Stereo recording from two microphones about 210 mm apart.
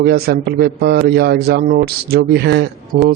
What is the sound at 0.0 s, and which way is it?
A man's voice, 45° right (ahead or behind).